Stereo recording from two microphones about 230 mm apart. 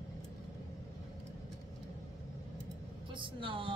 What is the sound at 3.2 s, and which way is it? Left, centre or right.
Speech, right.